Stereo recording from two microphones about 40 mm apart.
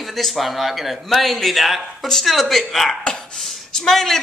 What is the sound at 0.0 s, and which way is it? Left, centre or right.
A man's voice, centre.